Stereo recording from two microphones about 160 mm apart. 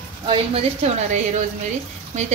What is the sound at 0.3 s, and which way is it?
A woman's voice, 40° right (ahead or behind).